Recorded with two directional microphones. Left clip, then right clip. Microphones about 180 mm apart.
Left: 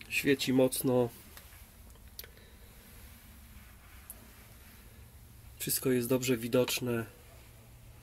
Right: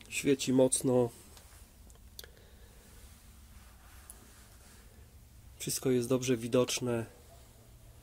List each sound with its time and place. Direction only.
0.0 s speech: 10° right (ahead or behind)
5.6 s speech: 20° right (ahead or behind)
6.1 s speech: 55° right (ahead or behind)
6.6 s speech: 15° right (ahead or behind)